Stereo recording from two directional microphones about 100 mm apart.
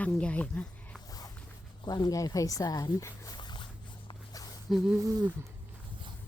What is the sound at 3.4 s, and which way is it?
Boat, 50° left (ahead or behind).